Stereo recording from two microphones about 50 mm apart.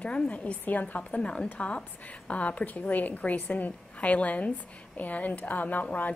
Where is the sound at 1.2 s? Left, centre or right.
Centre.